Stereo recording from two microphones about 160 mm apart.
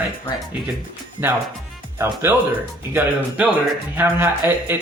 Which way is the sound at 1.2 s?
15° right (ahead or behind).